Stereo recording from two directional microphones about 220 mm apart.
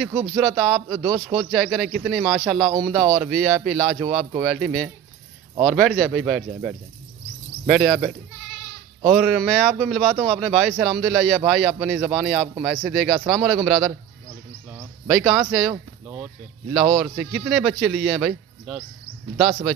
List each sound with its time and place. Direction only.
0.1 s speech: 20° right (ahead or behind)
0.4 s speech: centre (ahead or behind)
9.2 s speech: centre (ahead or behind)
15.7 s a sound: 5° right (ahead or behind)
16.9 s speech: 5° right (ahead or behind)